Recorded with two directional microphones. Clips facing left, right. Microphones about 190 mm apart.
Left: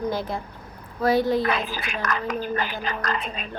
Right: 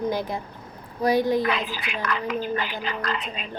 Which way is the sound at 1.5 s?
45° left (ahead or behind).